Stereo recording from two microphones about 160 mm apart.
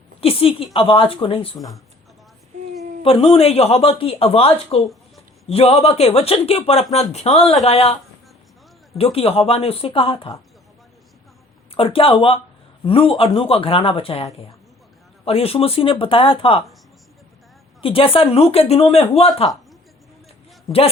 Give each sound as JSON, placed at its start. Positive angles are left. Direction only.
{"t": 0.2, "sound": "speech", "side_deg": 35}
{"t": 1.5, "sound": "speech", "side_deg": 0}
{"t": 3.0, "sound": "speech", "side_deg": 35}
{"t": 9.1, "sound": "speech", "side_deg": 35}
{"t": 11.7, "sound": "speech", "side_deg": 35}
{"t": 17.8, "sound": "speech", "side_deg": 35}